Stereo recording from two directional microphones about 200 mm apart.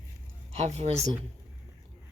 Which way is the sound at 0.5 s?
35° right (ahead or behind).